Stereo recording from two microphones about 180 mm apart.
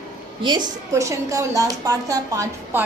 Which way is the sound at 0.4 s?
25° right (ahead or behind).